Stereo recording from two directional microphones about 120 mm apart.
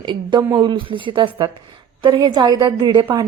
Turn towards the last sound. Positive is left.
turn(degrees=-40)  # may be behind; listen again after turning